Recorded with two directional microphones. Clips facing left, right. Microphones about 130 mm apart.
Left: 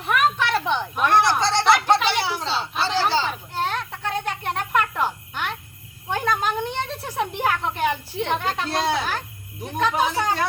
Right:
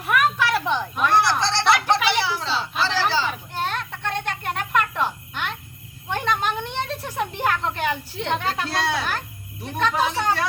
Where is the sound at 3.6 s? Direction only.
5° left (ahead or behind).